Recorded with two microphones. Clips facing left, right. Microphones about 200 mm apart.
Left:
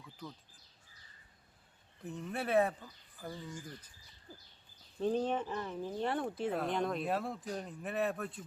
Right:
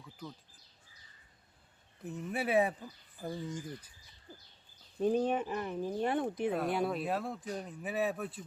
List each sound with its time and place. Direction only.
2.0 s speech: 5° right (ahead or behind)
3.2 s speech: 25° right (ahead or behind)
4.9 s speech: 15° right (ahead or behind)